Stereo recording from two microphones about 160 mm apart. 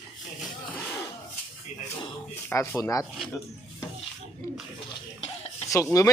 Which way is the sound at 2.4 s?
15° left (ahead or behind).